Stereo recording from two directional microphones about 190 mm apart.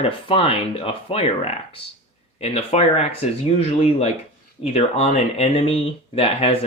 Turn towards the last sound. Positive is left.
turn(degrees=30)  # may be behind; listen again after turning